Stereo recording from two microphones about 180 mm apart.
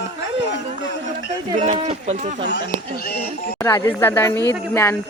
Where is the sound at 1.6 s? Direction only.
40° right (ahead or behind).